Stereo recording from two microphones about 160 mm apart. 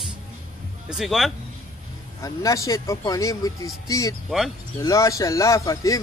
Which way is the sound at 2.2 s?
20° left (ahead or behind).